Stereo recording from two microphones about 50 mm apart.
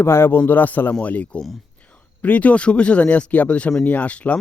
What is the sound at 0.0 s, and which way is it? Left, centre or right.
Speech, left.